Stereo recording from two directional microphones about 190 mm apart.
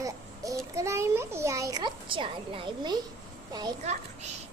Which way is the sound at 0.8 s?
15° right (ahead or behind).